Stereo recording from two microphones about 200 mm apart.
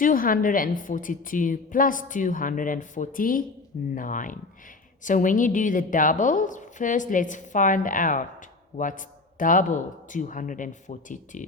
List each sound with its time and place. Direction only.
0.0 s a woman's voice: 45° left (ahead or behind)